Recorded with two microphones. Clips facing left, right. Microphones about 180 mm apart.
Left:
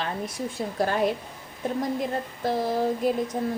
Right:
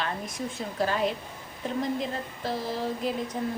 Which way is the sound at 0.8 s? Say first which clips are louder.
Left 2 dB; 50° left (ahead or behind).